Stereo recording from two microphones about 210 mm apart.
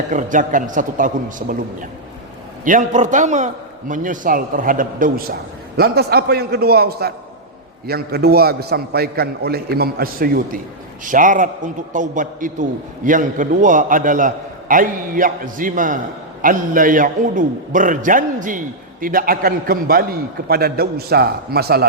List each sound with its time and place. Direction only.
0.1 s a man's voice: 35° right (ahead or behind)